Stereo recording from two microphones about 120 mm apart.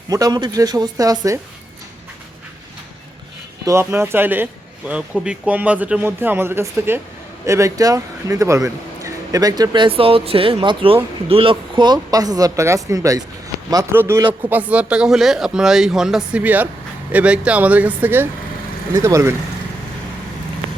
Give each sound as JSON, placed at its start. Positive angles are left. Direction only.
{"t": 0.1, "sound": "speech", "side_deg": -30}
{"t": 3.7, "sound": "speech", "side_deg": -20}